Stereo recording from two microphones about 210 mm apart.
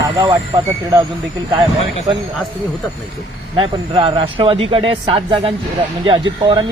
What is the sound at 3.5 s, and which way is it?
Speech, 25° right (ahead or behind).